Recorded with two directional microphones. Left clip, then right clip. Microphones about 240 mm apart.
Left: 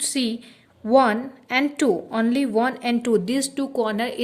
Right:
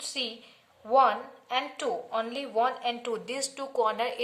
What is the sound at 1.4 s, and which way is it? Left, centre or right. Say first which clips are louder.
A woman's voice: left 9 dB; left.